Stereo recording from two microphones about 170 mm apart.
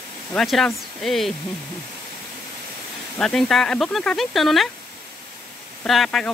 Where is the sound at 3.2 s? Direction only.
Centre (ahead or behind).